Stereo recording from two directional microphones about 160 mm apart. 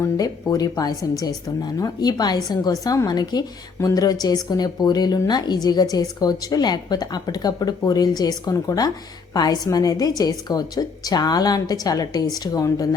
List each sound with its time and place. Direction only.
0.0 s speech: 25° left (ahead or behind)